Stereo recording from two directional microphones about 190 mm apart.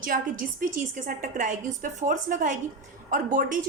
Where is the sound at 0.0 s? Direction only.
45° right (ahead or behind).